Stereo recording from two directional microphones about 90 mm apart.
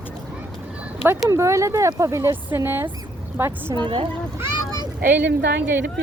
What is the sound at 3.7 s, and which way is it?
Speech, 65° right (ahead or behind).